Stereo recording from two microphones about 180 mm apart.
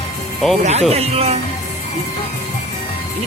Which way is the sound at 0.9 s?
35° right (ahead or behind).